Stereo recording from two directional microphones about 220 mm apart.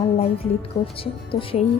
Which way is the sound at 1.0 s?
25° left (ahead or behind).